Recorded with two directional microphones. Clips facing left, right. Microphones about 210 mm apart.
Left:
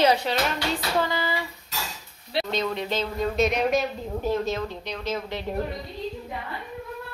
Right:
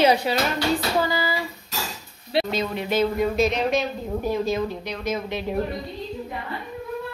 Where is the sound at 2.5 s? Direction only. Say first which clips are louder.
Right 2 dB; 5° right (ahead or behind).